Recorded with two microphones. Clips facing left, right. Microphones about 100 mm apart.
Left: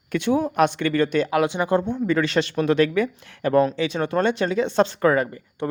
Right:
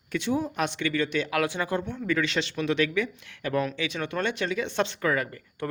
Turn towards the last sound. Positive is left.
turn(degrees=20)  # may be behind; listen again after turning